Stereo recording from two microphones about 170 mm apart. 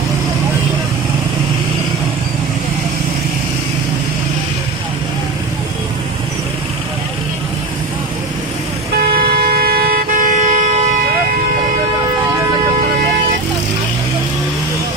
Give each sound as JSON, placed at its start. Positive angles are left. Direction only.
{"t": 9.0, "sound": "vehicle", "side_deg": -65}